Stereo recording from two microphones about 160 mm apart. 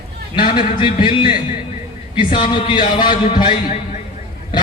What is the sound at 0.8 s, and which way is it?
A man's voice, 30° left (ahead or behind).